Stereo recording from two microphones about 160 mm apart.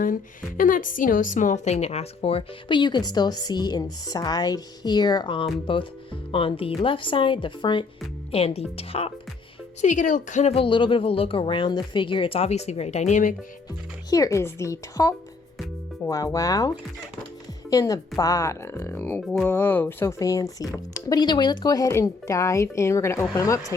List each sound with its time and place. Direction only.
0.0 s a woman's voice: 60° left (ahead or behind); by 9.1 s 40° left (ahead or behind)
9.8 s a woman's voice: 50° left (ahead or behind)
14.1 s speech: 20° left (ahead or behind)